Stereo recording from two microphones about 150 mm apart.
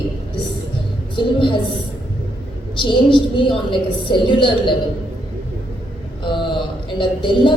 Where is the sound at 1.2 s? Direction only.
35° left (ahead or behind).